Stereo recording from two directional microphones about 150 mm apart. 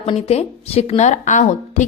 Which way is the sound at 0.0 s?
45° left (ahead or behind).